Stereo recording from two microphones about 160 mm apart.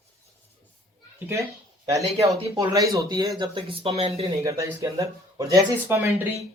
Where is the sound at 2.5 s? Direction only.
20° right (ahead or behind); by 4.3 s 40° right (ahead or behind).